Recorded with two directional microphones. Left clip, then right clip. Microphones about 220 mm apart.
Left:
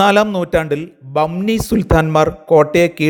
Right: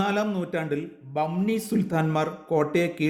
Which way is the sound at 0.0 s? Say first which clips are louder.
Left 14 dB; 45° left (ahead or behind).